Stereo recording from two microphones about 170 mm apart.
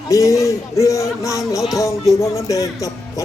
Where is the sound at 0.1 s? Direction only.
20° left (ahead or behind).